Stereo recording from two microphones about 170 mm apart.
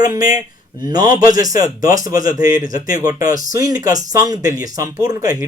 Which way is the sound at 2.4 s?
55° left (ahead or behind).